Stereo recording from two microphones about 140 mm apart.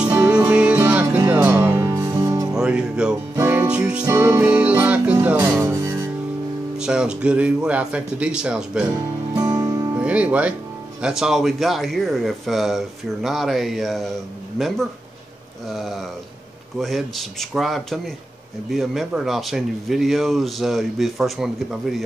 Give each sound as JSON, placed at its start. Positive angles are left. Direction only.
{"t": 0.1, "sound": "music", "side_deg": -10}
{"t": 2.5, "sound": "music", "side_deg": -5}
{"t": 4.0, "sound": "speech", "side_deg": -20}
{"t": 5.6, "sound": "music", "side_deg": -20}
{"t": 6.8, "sound": "speech", "side_deg": -5}
{"t": 9.9, "sound": "speech", "side_deg": -10}
{"t": 15.7, "sound": "speech", "side_deg": 0}